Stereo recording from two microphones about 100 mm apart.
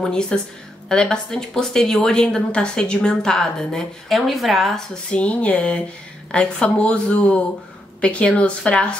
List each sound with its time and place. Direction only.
0.0 s speech: 10° left (ahead or behind)